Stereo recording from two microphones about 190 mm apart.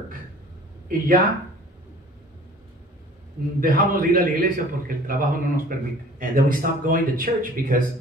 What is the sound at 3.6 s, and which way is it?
Speech, 45° right (ahead or behind).